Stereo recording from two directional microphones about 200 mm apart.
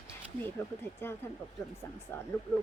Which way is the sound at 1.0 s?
10° left (ahead or behind).